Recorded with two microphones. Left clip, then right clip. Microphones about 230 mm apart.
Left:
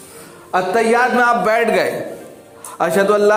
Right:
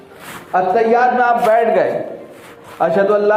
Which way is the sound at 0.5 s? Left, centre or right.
Left.